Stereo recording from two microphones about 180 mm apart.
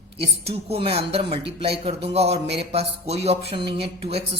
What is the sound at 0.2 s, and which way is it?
Speech, 35° right (ahead or behind).